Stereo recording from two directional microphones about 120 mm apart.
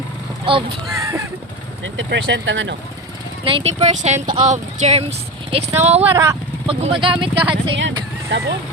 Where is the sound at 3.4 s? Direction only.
50° right (ahead or behind); by 5.0 s 70° right (ahead or behind).